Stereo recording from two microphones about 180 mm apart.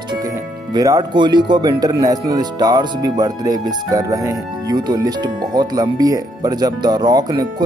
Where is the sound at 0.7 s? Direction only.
20° right (ahead or behind).